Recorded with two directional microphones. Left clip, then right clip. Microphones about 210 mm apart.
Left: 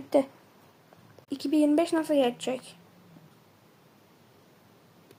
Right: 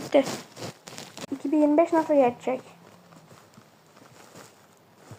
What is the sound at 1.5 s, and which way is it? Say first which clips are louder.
Speech: right 3 dB; 15° left (ahead or behind).